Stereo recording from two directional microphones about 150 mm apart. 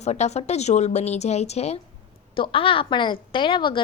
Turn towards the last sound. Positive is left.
turn(degrees=30)  # may be behind; listen again after turning